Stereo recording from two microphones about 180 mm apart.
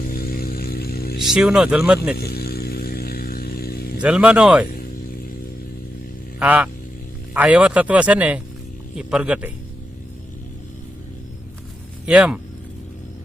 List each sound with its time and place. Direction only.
0.0 s mains hum: 55° left (ahead or behind)
1.2 s speech: 5° right (ahead or behind)
2.1 s a sound: 60° left (ahead or behind)
3.9 s speech: 5° right (ahead or behind)
6.4 s speech: 10° right (ahead or behind)
12.0 s speech: 5° right (ahead or behind)